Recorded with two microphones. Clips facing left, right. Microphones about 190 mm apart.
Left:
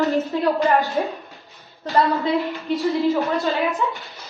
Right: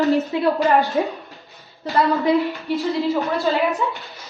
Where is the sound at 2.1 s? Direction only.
Centre (ahead or behind).